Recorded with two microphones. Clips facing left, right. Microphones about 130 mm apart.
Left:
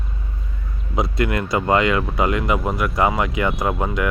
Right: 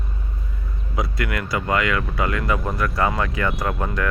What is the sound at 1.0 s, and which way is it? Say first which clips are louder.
Speech: left 5 dB; 25° left (ahead or behind).